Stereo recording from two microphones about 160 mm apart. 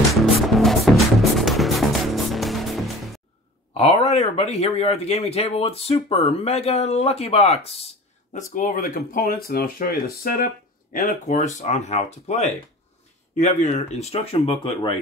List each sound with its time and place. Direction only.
0.1 s music: centre (ahead or behind)
3.7 s a sound: 40° left (ahead or behind)
4.1 s speech: 40° left (ahead or behind)
8.5 s speech: 60° left (ahead or behind); by 15.0 s 35° left (ahead or behind)